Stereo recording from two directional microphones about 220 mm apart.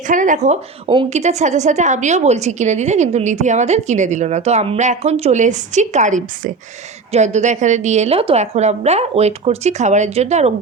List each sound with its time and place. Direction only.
0.1 s a woman's voice: 35° right (ahead or behind)